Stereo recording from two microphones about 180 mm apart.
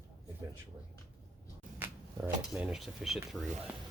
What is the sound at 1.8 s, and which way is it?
Speech, 10° right (ahead or behind).